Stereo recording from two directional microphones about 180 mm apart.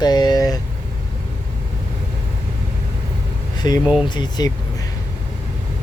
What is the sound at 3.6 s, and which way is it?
Speech, 25° left (ahead or behind).